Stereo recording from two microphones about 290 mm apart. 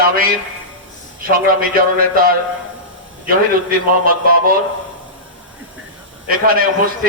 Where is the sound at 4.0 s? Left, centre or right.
Right.